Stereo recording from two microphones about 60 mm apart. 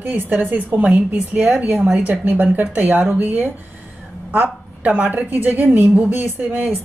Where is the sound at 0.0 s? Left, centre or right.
Right.